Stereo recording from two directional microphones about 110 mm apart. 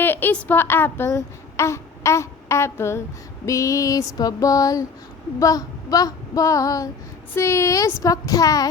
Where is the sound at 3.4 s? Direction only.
30° left (ahead or behind).